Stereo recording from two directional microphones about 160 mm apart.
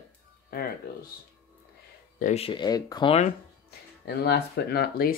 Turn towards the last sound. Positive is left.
turn(degrees=80)